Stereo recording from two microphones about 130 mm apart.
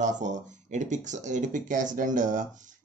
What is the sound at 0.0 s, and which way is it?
Speech, 70° right (ahead or behind).